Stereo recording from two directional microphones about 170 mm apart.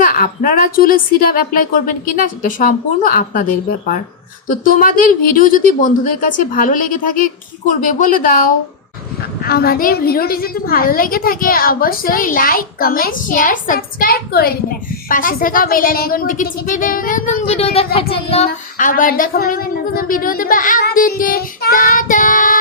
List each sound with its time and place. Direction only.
0.0 s a woman's voice: 55° left (ahead or behind)
4.4 s a woman's voice: 55° left (ahead or behind)